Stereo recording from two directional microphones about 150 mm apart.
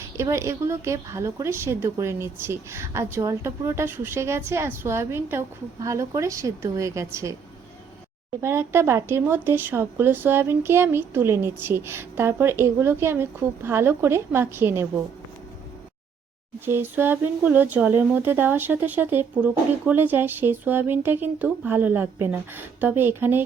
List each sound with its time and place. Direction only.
0.2 s a woman's voice: 20° right (ahead or behind)
8.4 s a woman's voice: 15° right (ahead or behind)
16.6 s a woman's voice: 15° right (ahead or behind)